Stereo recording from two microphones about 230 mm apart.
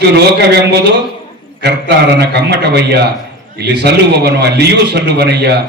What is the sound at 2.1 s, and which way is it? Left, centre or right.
A man's voice, right.